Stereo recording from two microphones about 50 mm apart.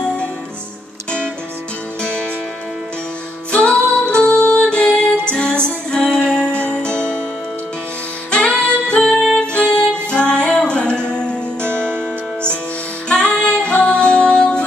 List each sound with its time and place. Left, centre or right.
2.0 s music: left
3.5 s music: left
8.3 s music: left
9.0 s music: centre
9.4 s music: centre
13.1 s music: centre